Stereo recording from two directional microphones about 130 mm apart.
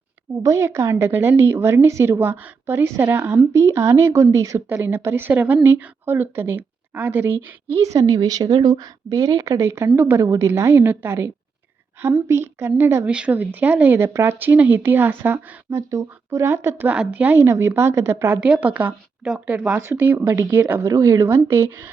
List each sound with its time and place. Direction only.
0.4 s a woman's voice: 20° right (ahead or behind)
13.1 s speech: 10° right (ahead or behind)
18.3 s speech: 10° right (ahead or behind)